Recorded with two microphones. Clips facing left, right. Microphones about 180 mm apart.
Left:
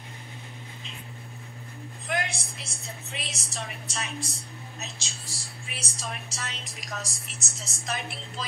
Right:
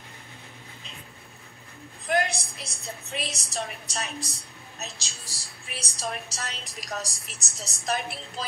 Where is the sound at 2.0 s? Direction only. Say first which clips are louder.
Right 5 dB; 40° right (ahead or behind).